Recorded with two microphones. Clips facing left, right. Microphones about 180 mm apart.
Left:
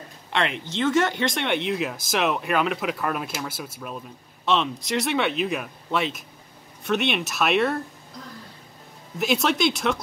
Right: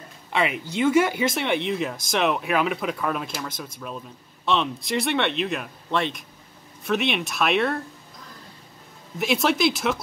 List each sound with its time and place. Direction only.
0.3 s speech: 5° right (ahead or behind)
9.2 s speech: centre (ahead or behind)